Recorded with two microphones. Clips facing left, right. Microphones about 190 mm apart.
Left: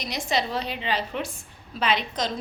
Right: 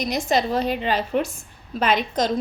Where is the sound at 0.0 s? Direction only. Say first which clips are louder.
Right 6 dB; 45° right (ahead or behind).